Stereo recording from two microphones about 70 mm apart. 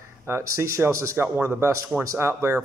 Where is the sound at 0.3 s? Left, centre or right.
Right.